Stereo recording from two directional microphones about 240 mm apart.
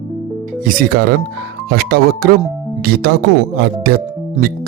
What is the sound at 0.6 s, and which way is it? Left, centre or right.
Speech, right.